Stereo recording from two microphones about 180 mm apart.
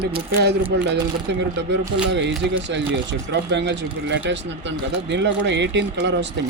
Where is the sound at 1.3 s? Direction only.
75° right (ahead or behind).